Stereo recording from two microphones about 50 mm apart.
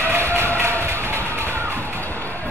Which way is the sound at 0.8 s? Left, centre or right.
Right.